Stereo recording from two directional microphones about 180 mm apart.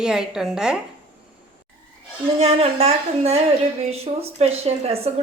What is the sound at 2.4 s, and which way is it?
A woman's voice, 35° right (ahead or behind).